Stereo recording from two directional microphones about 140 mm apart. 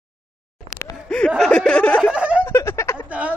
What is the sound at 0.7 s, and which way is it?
Laughter, 5° left (ahead or behind).